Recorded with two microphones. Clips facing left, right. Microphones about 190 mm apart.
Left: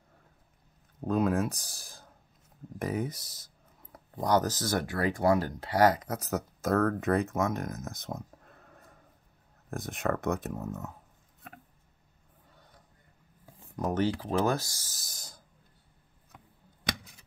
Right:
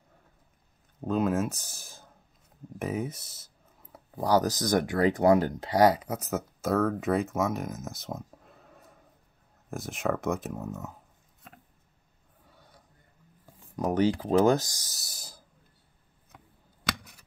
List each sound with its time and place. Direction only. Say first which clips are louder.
1.0 s speech: right 1 dB; 5° right (ahead or behind)
13.7 s speech: right 4 dB; 15° right (ahead or behind)
15.0 s a sound: right 1 dB; 5° right (ahead or behind)